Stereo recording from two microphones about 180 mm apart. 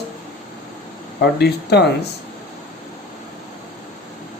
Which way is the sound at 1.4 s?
65° left (ahead or behind).